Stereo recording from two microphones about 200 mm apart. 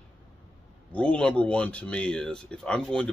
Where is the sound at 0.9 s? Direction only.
5° left (ahead or behind).